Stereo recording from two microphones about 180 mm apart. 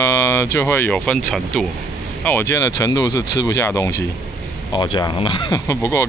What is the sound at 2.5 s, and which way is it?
Speech, 15° left (ahead or behind).